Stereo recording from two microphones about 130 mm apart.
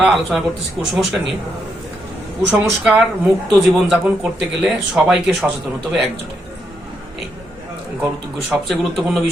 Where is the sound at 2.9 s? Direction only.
5° right (ahead or behind).